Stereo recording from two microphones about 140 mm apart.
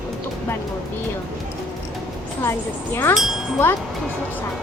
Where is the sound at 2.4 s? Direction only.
15° left (ahead or behind).